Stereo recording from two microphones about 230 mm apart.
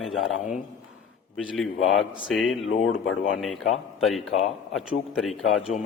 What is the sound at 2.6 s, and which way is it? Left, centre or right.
Speech, left.